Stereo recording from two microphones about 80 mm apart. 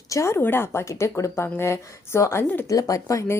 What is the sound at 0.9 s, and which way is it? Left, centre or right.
Speech, left.